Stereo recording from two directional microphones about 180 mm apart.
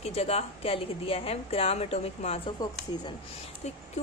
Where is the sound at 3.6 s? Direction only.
40° left (ahead or behind).